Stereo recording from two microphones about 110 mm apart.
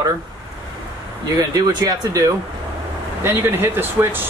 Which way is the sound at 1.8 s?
30° right (ahead or behind).